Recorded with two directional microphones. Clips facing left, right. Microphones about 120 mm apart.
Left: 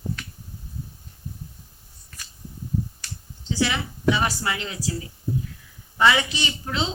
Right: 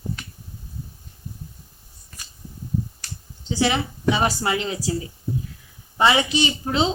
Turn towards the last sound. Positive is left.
turn(degrees=-25)  # may be behind; listen again after turning